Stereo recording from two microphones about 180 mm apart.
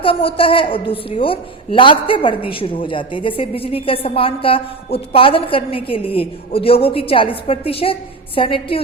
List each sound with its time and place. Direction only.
0.0 s a woman's voice: 30° left (ahead or behind)